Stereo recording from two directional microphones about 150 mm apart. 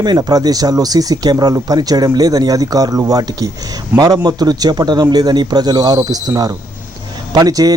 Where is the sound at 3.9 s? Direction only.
15° right (ahead or behind).